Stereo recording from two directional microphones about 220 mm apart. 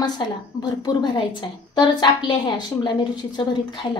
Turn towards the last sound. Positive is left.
turn(degrees=20)  # may be behind; listen again after turning